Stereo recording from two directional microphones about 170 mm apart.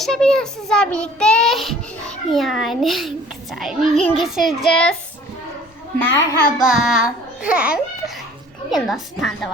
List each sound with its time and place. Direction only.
0.0 s a child's voice: 5° left (ahead or behind)
6.1 s a child's voice: 90° left
6.6 s a child's voice: centre (ahead or behind)